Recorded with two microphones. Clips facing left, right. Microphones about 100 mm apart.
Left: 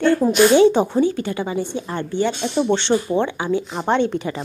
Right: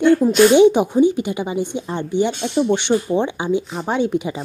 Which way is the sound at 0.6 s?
15° right (ahead or behind).